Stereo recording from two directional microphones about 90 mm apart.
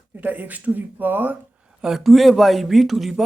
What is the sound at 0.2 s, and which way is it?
Speech, 20° right (ahead or behind).